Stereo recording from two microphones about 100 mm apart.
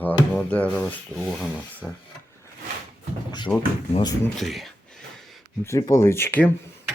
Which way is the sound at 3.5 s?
25° left (ahead or behind).